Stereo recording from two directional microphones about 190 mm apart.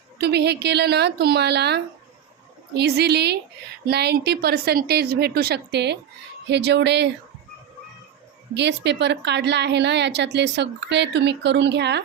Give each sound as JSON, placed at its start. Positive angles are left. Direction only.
{"t": 0.2, "sound": "a woman's voice", "side_deg": -60}
{"t": 8.5, "sound": "a woman's voice", "side_deg": -65}